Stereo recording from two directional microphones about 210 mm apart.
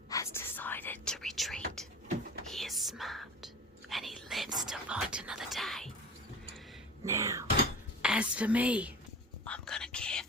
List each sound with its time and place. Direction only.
0.1 s whispering: 15° left (ahead or behind)
7.0 s a sound: 15° right (ahead or behind)
9.4 s whispering: 5° left (ahead or behind)